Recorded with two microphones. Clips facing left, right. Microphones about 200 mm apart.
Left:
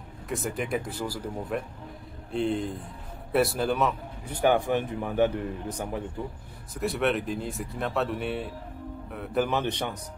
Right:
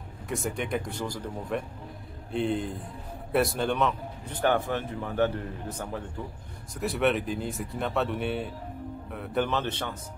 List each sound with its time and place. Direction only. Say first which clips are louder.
0.3 s a man's voice: left 1 dB; centre (ahead or behind)
6.7 s speech: even; centre (ahead or behind)
9.5 s a man's voice: left 2 dB; 15° left (ahead or behind)